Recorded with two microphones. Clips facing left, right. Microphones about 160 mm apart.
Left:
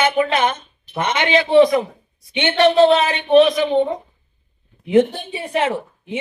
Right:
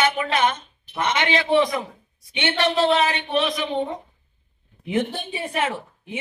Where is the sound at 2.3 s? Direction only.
20° left (ahead or behind).